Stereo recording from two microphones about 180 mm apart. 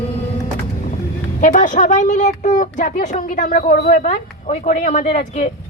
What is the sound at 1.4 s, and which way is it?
Speech, 50° left (ahead or behind).